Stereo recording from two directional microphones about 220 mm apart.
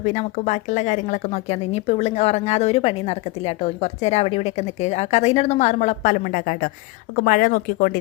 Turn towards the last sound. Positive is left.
turn(degrees=40)  # may be behind; listen again after turning